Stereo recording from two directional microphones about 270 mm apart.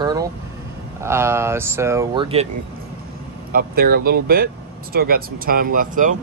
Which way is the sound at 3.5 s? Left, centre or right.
Right.